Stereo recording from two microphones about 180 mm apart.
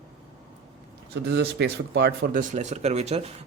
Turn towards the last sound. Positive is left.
turn(degrees=-35)  # may be behind; listen again after turning